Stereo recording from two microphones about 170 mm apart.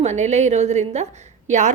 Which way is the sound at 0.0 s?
40° right (ahead or behind).